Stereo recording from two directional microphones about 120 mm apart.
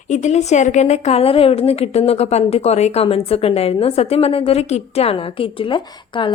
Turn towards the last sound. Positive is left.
turn(degrees=45)  # may be behind; listen again after turning